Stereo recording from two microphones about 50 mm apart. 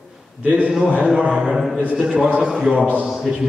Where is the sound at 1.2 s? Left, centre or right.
Centre.